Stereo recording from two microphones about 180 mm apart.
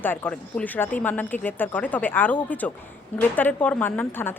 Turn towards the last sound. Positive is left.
turn(degrees=10)  # may be behind; listen again after turning